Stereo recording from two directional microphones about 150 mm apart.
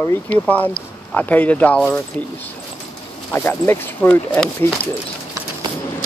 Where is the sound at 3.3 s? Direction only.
15° left (ahead or behind).